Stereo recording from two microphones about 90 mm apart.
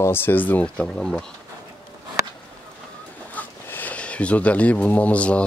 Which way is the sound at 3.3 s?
20° left (ahead or behind).